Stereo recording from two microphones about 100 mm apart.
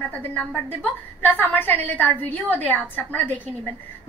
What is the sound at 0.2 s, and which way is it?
A woman's voice, 10° left (ahead or behind).